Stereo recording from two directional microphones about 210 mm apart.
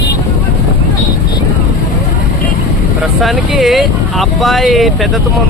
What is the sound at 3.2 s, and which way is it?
Vehicle, centre (ahead or behind).